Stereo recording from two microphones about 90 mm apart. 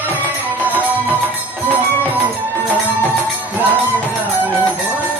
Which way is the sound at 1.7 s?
20° right (ahead or behind).